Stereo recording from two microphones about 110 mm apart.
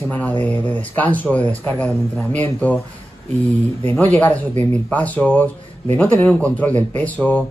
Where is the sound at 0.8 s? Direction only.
15° left (ahead or behind).